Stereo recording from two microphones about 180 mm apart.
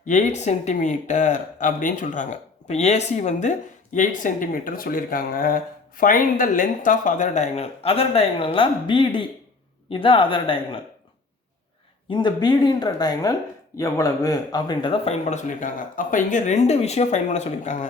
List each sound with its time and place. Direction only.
0.0 s speech: 40° left (ahead or behind)
12.0 s speech: 25° left (ahead or behind); by 17.8 s 40° left (ahead or behind)